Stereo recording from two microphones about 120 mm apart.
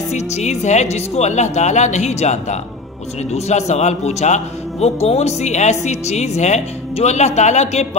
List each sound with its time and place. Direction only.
0.1 s a man's voice: 70° left (ahead or behind)